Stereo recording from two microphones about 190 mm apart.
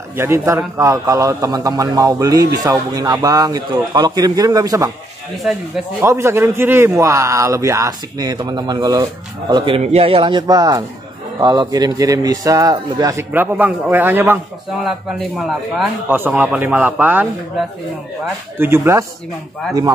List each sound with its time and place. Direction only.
0.1 s a man's voice: 15° right (ahead or behind)
5.9 s a man's voice: 15° right (ahead or behind)